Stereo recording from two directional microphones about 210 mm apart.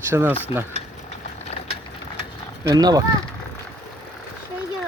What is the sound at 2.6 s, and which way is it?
Speech, 20° right (ahead or behind).